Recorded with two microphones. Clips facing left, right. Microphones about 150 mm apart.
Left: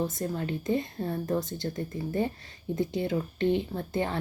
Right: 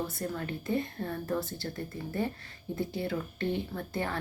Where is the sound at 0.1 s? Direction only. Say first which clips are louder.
Left 4 dB; 20° left (ahead or behind).